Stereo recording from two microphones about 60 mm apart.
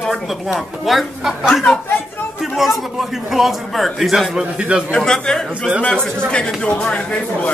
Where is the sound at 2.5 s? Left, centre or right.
Centre.